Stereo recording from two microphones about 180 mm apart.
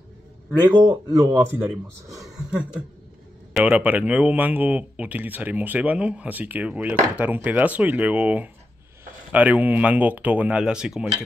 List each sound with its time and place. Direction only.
0.7 s speech: 25° right (ahead or behind)
2.1 s a sound: 5° right (ahead or behind)
3.5 s speech: 5° right (ahead or behind)